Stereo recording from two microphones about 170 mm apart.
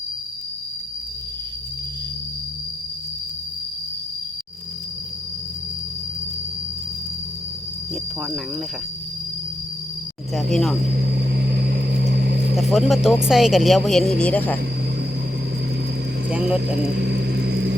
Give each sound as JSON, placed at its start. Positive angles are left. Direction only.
{"t": 10.3, "sound": "speech", "side_deg": 0}
{"t": 10.9, "sound": "a sound", "side_deg": -65}
{"t": 12.5, "sound": "speech", "side_deg": 0}
{"t": 16.3, "sound": "speech", "side_deg": -5}
{"t": 16.8, "sound": "vehicle", "side_deg": -80}